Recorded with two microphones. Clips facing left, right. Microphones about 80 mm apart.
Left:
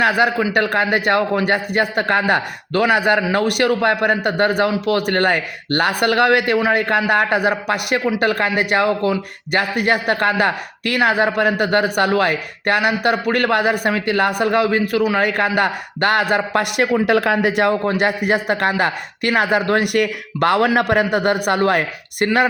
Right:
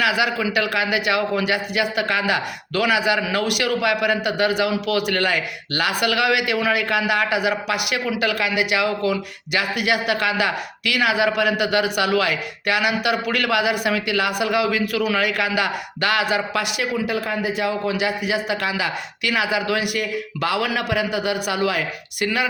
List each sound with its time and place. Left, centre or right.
0.0 s a man's voice: left
15.2 s a man's voice: left